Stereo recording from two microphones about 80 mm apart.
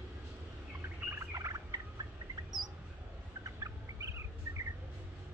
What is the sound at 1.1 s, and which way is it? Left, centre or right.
Bird, right.